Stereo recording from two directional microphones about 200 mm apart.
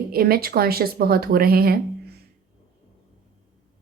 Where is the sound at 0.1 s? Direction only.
50° right (ahead or behind).